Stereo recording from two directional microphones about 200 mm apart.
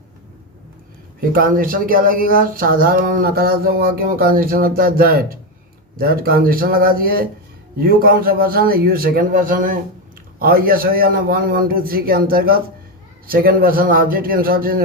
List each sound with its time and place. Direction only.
1.2 s speech: 45° right (ahead or behind)